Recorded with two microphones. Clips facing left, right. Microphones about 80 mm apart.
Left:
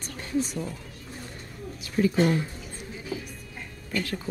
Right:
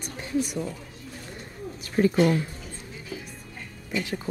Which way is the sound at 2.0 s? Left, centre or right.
Right.